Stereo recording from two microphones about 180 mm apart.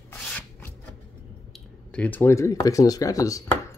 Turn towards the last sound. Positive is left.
turn(degrees=20)  # may be behind; listen again after turning